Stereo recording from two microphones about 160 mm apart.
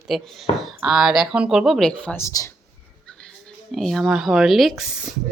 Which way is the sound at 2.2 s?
20° left (ahead or behind).